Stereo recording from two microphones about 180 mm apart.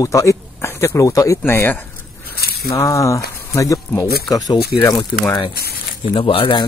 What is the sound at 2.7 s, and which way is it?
Speech, 15° left (ahead or behind).